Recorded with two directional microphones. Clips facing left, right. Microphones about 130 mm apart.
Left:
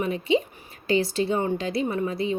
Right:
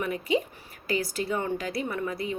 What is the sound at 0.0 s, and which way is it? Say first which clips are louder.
Speech: left 4 dB; 25° left (ahead or behind).